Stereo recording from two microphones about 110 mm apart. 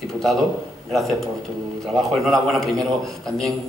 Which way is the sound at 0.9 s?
Centre (ahead or behind).